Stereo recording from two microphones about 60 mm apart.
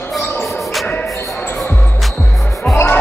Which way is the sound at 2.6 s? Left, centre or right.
Left.